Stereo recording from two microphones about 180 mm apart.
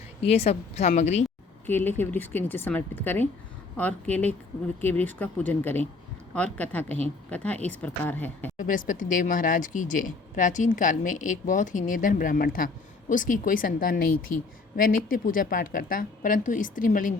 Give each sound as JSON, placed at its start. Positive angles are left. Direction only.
{"t": 0.3, "sound": "a woman's voice", "side_deg": 35}
{"t": 1.6, "sound": "speech", "side_deg": 10}
{"t": 8.5, "sound": "speech", "side_deg": 45}